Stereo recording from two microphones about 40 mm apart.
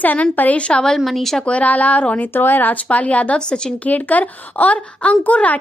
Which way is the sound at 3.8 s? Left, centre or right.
Left.